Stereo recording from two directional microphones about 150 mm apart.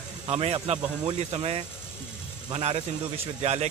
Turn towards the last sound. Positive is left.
turn(degrees=-45)  # may be behind; listen again after turning